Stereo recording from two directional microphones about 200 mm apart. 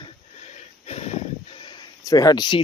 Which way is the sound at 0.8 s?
30° left (ahead or behind).